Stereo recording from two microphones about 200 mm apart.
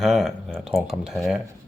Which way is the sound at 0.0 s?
Centre (ahead or behind).